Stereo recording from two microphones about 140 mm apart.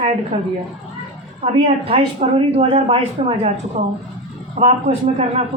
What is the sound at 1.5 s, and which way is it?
Speech, 40° right (ahead or behind).